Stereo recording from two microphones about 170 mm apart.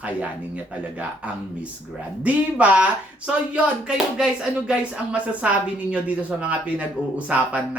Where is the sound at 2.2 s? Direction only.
10° right (ahead or behind).